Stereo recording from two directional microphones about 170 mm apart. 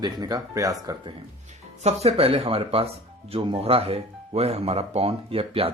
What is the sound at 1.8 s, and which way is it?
Speech, 35° right (ahead or behind).